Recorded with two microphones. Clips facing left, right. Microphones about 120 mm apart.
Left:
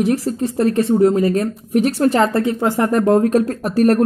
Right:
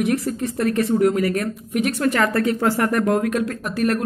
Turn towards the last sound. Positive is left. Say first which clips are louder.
# left 7 dB
turn(degrees=35)  # may be behind; listen again after turning